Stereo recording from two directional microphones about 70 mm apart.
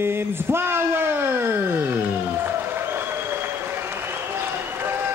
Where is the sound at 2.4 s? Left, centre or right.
Right.